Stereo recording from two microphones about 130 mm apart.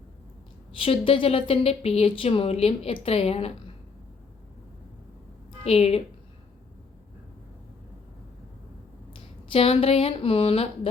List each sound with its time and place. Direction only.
0.7 s a woman's voice: 45° left (ahead or behind)
5.6 s a woman's voice: 50° left (ahead or behind)
9.5 s a woman's voice: 50° left (ahead or behind)